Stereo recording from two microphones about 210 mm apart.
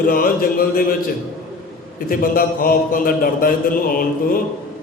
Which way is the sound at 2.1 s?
45° left (ahead or behind).